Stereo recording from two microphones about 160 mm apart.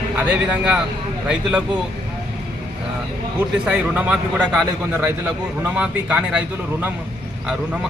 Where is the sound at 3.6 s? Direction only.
10° right (ahead or behind).